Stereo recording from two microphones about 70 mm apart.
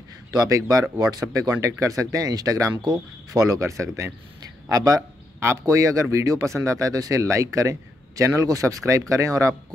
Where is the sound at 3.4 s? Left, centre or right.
Right.